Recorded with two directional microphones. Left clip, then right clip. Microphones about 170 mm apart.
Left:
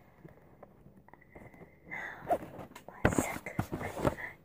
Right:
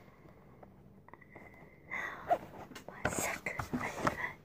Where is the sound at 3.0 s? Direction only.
60° left (ahead or behind).